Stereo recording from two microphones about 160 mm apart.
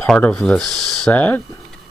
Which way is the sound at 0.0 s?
5° left (ahead or behind).